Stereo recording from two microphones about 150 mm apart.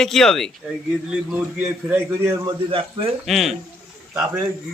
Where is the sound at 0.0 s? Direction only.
5° left (ahead or behind).